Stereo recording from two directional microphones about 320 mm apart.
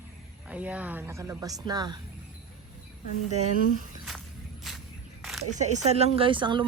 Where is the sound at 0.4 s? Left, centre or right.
Centre.